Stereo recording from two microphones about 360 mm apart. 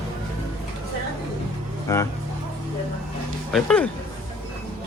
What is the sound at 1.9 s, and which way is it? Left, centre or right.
Speech, centre.